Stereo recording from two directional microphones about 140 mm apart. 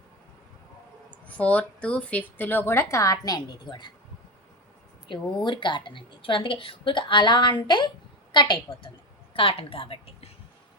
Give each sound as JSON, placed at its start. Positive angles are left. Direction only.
{"t": 1.1, "sound": "speech", "side_deg": 10}
{"t": 5.4, "sound": "a woman's voice", "side_deg": 35}